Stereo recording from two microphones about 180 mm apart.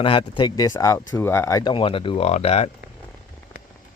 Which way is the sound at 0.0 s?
30° left (ahead or behind).